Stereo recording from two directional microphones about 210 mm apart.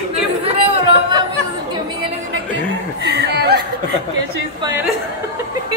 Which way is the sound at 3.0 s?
50° right (ahead or behind).